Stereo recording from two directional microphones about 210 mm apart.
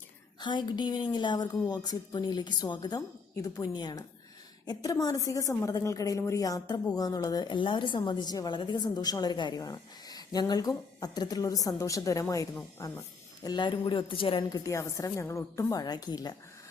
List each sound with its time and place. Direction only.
0.3 s a woman's voice: 20° left (ahead or behind)